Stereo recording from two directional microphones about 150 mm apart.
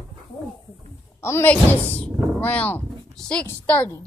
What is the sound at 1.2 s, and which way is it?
Speech, 15° left (ahead or behind).